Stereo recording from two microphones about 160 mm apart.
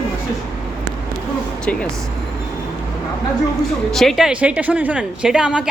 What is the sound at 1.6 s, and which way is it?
Speech, 5° left (ahead or behind).